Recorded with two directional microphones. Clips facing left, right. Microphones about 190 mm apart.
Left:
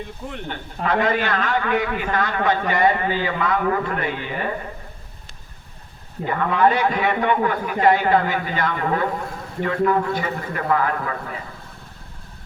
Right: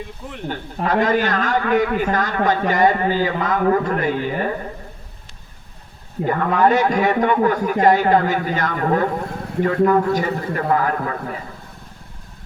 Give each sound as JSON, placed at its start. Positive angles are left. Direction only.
{"t": 0.4, "sound": "a man's voice", "side_deg": -40}
{"t": 6.2, "sound": "a man's voice", "side_deg": -45}